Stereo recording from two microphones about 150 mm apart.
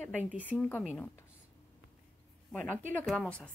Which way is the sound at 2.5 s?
5° left (ahead or behind).